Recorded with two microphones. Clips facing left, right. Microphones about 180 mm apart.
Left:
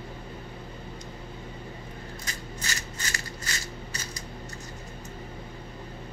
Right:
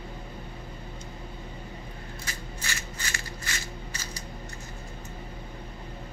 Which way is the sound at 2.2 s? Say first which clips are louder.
Left 1 dB; 40° left (ahead or behind).